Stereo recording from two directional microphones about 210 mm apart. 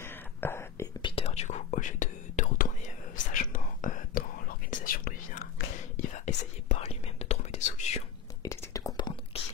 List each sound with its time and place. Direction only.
0.0 s whispering: 10° left (ahead or behind)
1.0 s whispering: 30° left (ahead or behind); by 5.7 s 50° left (ahead or behind)
5.9 s whispering: 35° left (ahead or behind)
8.4 s whispering: 15° left (ahead or behind)